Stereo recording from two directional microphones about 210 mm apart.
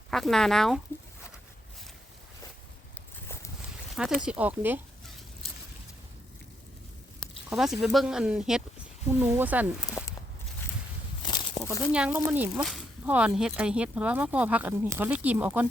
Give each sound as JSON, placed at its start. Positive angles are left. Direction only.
{"t": 0.1, "sound": "speech", "side_deg": 0}
{"t": 3.9, "sound": "speech", "side_deg": 0}
{"t": 7.2, "sound": "speech", "side_deg": 0}
{"t": 11.2, "sound": "a sound", "side_deg": 20}
{"t": 11.9, "sound": "speech", "side_deg": -5}